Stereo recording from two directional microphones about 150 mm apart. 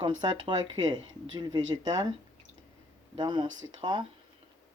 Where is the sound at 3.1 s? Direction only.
30° right (ahead or behind).